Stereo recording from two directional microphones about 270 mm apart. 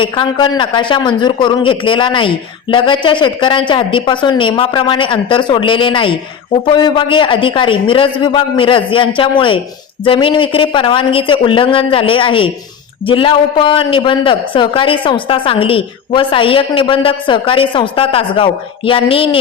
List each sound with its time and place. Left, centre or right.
0.0 s a man's voice: centre